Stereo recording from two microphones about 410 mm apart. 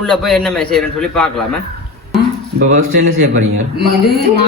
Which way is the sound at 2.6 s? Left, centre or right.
Right.